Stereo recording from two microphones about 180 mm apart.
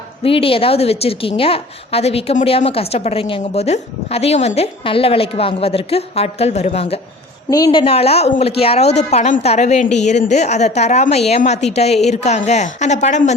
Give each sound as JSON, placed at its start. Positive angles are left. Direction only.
{"t": 0.2, "sound": "a woman's voice", "side_deg": 30}
{"t": 7.5, "sound": "a woman's voice", "side_deg": 25}